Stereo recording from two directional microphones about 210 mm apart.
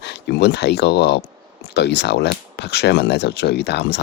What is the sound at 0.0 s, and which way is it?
Speech, 50° left (ahead or behind).